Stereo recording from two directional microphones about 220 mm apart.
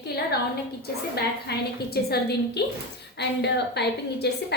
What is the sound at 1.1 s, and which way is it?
A woman's voice, 45° left (ahead or behind).